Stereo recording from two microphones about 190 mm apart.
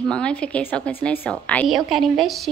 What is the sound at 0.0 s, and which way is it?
A woman's voice, 5° left (ahead or behind).